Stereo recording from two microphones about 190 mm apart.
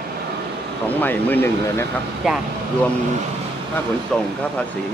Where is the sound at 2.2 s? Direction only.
5° right (ahead or behind).